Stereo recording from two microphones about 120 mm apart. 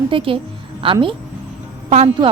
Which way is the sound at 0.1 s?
50° right (ahead or behind).